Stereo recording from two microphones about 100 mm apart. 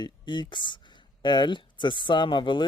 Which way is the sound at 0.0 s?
50° left (ahead or behind).